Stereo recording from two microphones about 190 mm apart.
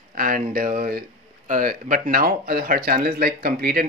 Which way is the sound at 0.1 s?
50° right (ahead or behind).